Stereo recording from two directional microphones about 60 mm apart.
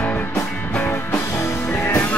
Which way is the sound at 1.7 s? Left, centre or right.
Left.